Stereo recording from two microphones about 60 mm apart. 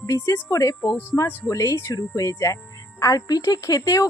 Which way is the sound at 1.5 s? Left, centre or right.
Left.